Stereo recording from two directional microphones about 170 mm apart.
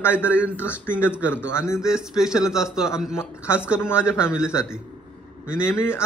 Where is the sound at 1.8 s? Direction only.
5° right (ahead or behind).